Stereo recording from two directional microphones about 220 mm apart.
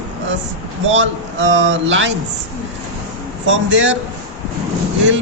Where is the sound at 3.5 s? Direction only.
60° right (ahead or behind).